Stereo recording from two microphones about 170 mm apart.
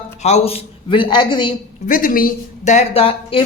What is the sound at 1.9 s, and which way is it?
A woman's voice, 55° left (ahead or behind).